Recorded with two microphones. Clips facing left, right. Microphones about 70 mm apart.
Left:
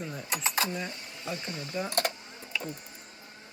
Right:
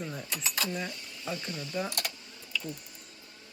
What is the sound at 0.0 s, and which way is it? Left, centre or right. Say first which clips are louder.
Speech: even; centre.